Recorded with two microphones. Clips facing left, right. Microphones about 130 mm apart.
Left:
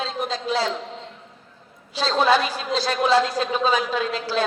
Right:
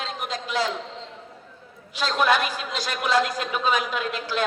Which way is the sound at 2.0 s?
30° left (ahead or behind).